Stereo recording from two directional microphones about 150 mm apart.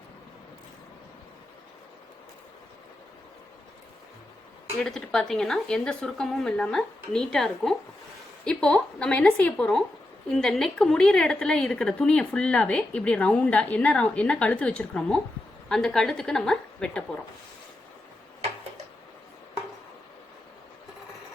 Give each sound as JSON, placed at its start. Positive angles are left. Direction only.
{"t": 4.8, "sound": "a woman's voice", "side_deg": 5}